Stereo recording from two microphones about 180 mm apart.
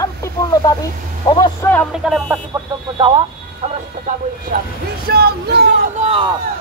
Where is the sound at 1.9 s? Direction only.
Centre (ahead or behind).